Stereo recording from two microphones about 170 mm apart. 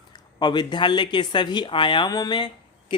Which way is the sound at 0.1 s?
25° left (ahead or behind).